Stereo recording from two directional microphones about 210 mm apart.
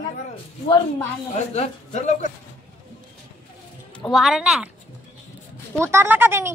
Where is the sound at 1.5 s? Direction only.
30° left (ahead or behind).